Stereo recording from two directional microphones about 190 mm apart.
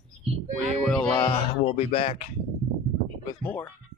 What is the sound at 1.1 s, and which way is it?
Speech, 20° left (ahead or behind).